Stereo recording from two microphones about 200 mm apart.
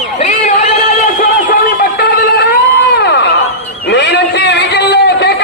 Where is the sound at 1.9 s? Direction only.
55° left (ahead or behind).